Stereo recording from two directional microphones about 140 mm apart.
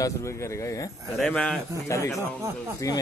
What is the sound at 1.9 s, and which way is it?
Speech, 20° left (ahead or behind).